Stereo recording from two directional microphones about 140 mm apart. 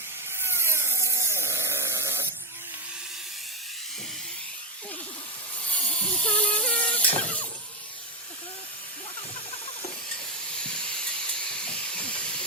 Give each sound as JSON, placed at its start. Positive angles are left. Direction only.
{"t": 0.3, "sound": "wood", "side_deg": -15}
{"t": 5.9, "sound": "a sound", "side_deg": 10}
{"t": 10.6, "sound": "steam", "side_deg": 5}